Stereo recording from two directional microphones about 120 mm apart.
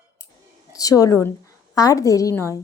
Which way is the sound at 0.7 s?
30° left (ahead or behind).